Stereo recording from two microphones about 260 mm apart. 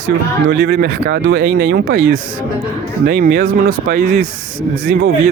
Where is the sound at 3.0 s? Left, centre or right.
Right.